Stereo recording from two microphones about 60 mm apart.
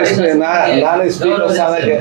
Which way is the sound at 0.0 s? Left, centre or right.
Centre.